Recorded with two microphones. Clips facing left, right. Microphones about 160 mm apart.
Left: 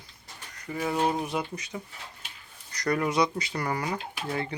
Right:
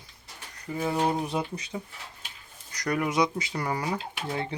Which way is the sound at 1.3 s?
25° right (ahead or behind).